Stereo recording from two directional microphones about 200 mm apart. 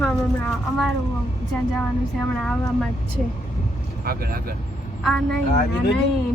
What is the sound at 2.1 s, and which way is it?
Speech, 5° left (ahead or behind).